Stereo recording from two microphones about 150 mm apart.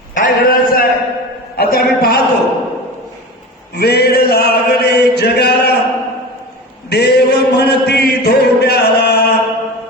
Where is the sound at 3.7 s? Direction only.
90° left.